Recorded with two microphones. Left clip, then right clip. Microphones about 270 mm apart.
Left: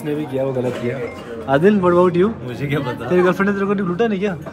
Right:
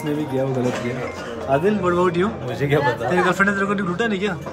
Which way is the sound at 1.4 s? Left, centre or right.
Left.